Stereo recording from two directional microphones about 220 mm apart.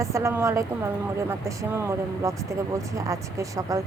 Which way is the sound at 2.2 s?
15° right (ahead or behind).